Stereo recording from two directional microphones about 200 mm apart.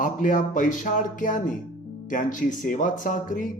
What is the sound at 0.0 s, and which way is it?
Speech, 40° left (ahead or behind).